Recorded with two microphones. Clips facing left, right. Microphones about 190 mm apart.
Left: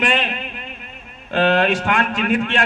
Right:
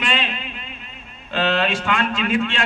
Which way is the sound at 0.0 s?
55° left (ahead or behind).